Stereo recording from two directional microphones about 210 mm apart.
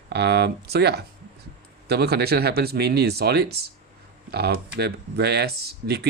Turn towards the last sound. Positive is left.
turn(degrees=-50)  # may be behind; listen again after turning